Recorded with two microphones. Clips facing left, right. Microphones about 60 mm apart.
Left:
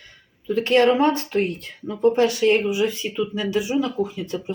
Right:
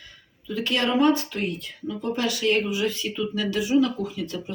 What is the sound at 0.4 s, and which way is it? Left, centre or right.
Speech, left.